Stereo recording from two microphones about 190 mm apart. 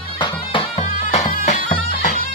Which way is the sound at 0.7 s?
40° left (ahead or behind).